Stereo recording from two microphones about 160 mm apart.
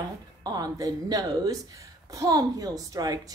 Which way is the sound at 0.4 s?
25° right (ahead or behind).